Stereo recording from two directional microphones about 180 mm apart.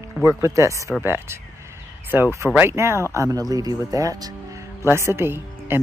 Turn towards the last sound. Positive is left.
turn(degrees=-15)  # may be behind; listen again after turning